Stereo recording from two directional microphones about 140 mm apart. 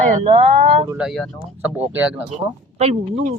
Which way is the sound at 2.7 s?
55° right (ahead or behind).